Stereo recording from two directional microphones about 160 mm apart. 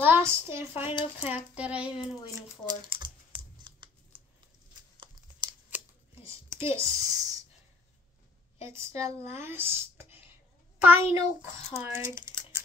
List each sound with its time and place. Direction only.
0.0 s a woman's voice: 15° right (ahead or behind)
2.1 s speech: 20° left (ahead or behind)
2.6 s computer keyboard: 25° right (ahead or behind)
4.9 s tearing: 30° right (ahead or behind)
5.7 s a sound: 15° right (ahead or behind)
6.8 s speech: 20° right (ahead or behind)
8.5 s speech: 15° right (ahead or behind)